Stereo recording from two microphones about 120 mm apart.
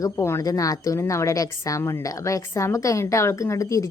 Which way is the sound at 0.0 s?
25° left (ahead or behind).